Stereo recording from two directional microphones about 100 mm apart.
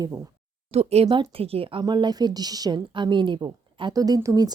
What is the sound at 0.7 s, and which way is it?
Speech, 90° right.